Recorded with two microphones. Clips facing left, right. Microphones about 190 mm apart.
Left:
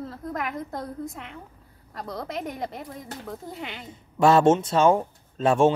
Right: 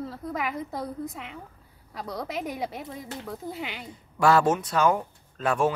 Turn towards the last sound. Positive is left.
turn(degrees=25)  # may be behind; listen again after turning